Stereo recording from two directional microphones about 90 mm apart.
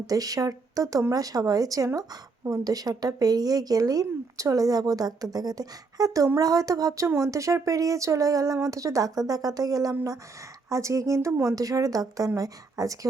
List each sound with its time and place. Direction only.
0.1 s a woman's voice: 40° right (ahead or behind)